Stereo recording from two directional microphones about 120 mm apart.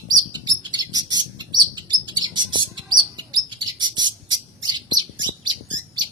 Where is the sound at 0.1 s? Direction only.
35° right (ahead or behind).